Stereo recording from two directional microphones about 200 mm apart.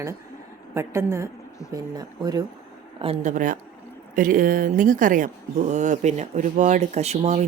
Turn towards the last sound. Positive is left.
turn(degrees=-35)  # may be behind; listen again after turning